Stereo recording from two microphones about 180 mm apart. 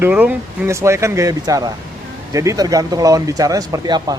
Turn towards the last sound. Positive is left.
turn(degrees=-20)  # may be behind; listen again after turning